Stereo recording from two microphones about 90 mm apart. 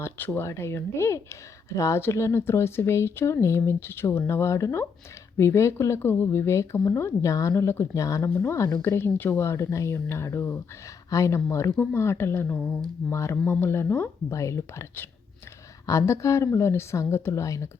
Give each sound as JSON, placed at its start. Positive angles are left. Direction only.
{"t": 0.0, "sound": "speech", "side_deg": 25}
{"t": 12.5, "sound": "speech", "side_deg": 5}
{"t": 13.1, "sound": "speech", "side_deg": 30}